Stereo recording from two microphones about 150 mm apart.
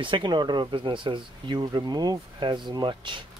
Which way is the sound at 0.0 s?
30° right (ahead or behind).